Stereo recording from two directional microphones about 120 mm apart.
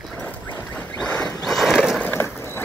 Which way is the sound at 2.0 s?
15° left (ahead or behind).